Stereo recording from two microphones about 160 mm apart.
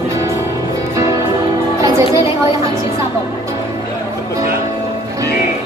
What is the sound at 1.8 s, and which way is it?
Music, 20° right (ahead or behind).